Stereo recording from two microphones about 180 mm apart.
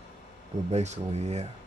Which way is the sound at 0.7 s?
40° right (ahead or behind).